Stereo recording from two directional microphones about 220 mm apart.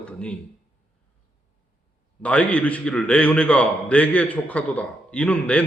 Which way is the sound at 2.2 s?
5° left (ahead or behind).